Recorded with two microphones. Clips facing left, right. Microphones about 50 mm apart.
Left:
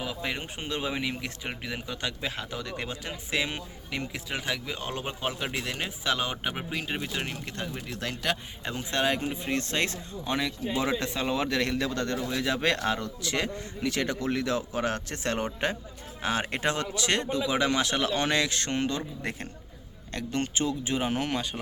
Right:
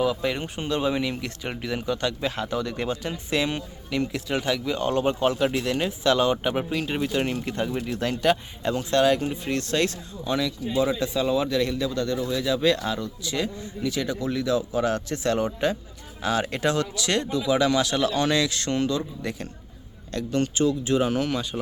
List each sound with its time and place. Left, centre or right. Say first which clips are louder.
0.0 s speech: right 8 dB; centre
8.6 s speech: right 7 dB; centre; by 10.5 s left
11.0 s a man's voice: right 5 dB; left
12.2 s a man's voice: right 5 dB; left